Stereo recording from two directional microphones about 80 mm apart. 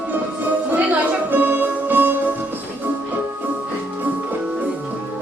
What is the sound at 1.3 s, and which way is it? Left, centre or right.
Music, right.